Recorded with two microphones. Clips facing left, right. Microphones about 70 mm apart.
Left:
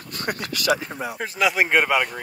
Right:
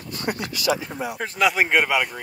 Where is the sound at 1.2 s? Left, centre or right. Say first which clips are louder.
Right 1 dB; centre.